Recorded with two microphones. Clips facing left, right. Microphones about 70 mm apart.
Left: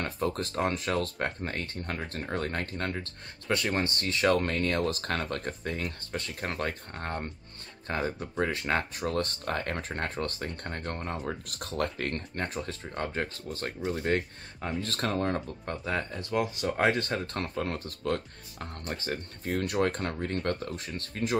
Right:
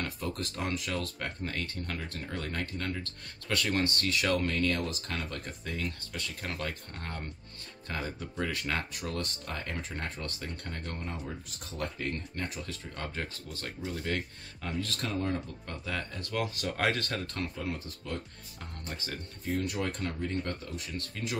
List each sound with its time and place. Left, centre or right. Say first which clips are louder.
0.0 s speech: left 5 dB; left
11.2 s speech: left 6 dB; left
15.0 s speech: left 5 dB; left
17.6 s speech: left 4 dB; left
18.9 s speech: left 6 dB; left